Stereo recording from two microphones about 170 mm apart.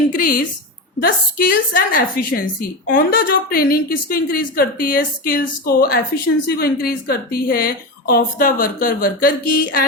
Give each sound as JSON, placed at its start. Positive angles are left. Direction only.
{"t": 0.1, "sound": "a woman's voice", "side_deg": 55}